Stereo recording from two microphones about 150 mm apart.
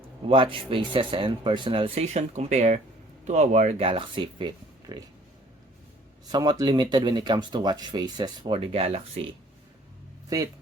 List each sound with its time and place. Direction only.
0.3 s speech: 35° right (ahead or behind)
6.3 s speech: 25° right (ahead or behind)
10.2 s speech: 20° right (ahead or behind)